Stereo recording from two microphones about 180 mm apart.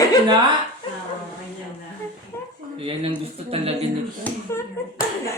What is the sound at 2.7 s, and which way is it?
Speech, 30° right (ahead or behind).